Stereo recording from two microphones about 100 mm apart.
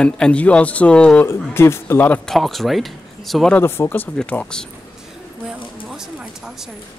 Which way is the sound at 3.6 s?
25° left (ahead or behind).